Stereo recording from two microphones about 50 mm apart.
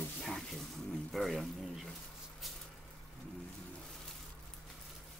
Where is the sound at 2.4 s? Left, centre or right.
Centre.